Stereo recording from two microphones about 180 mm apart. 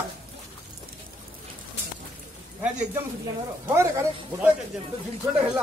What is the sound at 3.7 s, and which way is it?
Speech, 15° right (ahead or behind).